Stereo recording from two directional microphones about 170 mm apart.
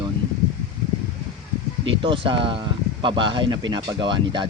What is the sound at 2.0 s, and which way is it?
Speech, 30° right (ahead or behind).